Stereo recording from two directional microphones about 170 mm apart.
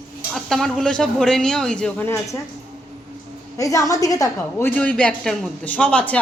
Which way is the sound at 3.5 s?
20° left (ahead or behind).